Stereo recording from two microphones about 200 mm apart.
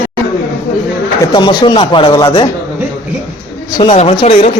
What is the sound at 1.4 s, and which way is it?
Speech, 25° left (ahead or behind).